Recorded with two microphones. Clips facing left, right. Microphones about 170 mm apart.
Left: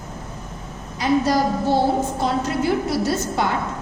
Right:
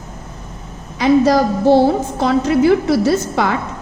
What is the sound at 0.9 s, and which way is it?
A woman's voice, 90° right.